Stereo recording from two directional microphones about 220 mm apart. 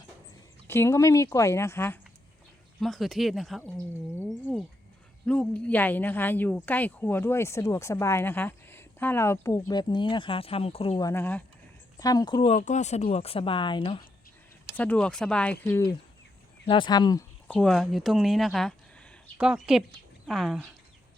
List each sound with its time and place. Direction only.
0.7 s a woman's voice: 10° left (ahead or behind)
12.5 s speech: 35° left (ahead or behind)
14.8 s a woman's voice: 5° left (ahead or behind)